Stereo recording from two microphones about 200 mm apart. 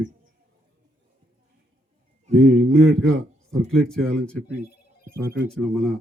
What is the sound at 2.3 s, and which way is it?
Music, 35° right (ahead or behind).